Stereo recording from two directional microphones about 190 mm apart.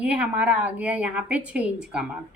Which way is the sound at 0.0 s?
5° right (ahead or behind).